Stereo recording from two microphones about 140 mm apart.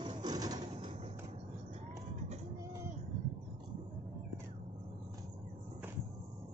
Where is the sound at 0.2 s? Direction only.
30° right (ahead or behind).